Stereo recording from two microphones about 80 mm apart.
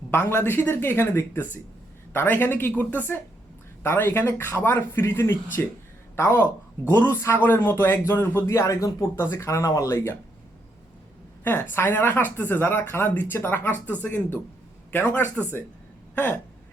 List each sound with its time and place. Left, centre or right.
0.1 s speech: left
6.4 s speech: left
7.1 s speech: left
8.4 s speech: left
11.4 s speech: left